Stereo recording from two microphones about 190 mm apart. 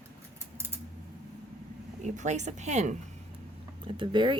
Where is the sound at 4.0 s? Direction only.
25° right (ahead or behind).